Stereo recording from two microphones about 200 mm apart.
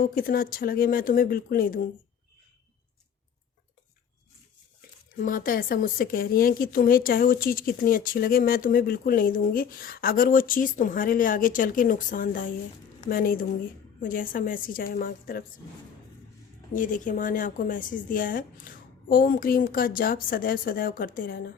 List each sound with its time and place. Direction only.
0.0 s a woman's voice: 45° left (ahead or behind)
5.1 s a woman's voice: 45° left (ahead or behind)
16.7 s a woman's voice: 40° left (ahead or behind)